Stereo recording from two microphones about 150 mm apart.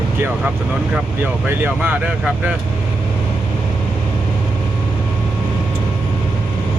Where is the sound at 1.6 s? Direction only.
10° right (ahead or behind).